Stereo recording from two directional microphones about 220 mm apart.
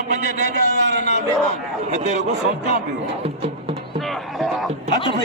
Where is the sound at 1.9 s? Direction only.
35° right (ahead or behind).